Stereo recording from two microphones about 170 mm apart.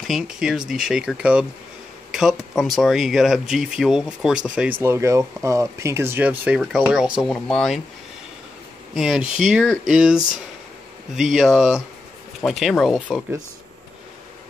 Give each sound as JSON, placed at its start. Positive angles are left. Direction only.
{"t": 0.0, "sound": "speech", "side_deg": 0}
{"t": 8.9, "sound": "speech", "side_deg": -5}